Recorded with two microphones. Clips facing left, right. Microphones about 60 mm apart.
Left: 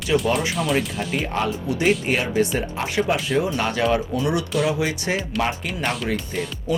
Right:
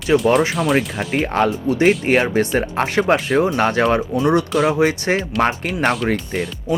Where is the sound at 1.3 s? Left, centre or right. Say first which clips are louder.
Right 6 dB; right.